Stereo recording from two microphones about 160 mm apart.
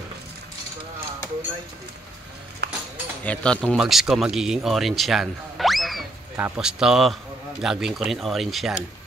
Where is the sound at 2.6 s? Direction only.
90° right.